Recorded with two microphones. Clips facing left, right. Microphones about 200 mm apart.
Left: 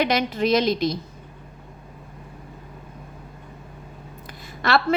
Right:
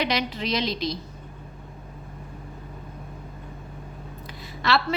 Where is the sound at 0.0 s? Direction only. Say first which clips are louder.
Left 5 dB; 50° left (ahead or behind).